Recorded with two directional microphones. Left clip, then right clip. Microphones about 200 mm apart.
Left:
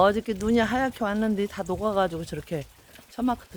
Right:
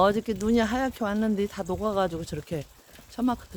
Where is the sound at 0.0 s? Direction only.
10° right (ahead or behind).